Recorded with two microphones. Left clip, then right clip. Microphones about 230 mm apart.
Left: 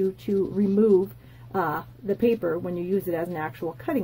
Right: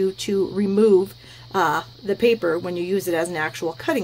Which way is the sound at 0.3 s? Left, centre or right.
Centre.